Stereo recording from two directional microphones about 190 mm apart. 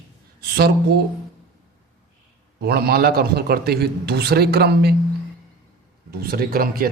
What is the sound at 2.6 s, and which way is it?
A man's voice, 55° right (ahead or behind).